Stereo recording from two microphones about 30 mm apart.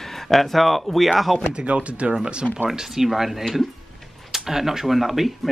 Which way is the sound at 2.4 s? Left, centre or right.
Left.